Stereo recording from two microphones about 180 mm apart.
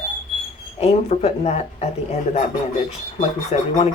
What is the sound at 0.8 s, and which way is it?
Speech, 35° left (ahead or behind).